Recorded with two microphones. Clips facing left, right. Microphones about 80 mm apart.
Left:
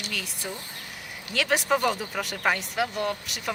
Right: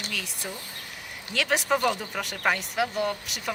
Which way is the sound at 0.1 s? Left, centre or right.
Centre.